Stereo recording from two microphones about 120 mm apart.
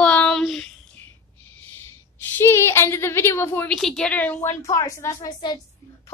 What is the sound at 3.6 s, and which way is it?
Speech, 5° left (ahead or behind).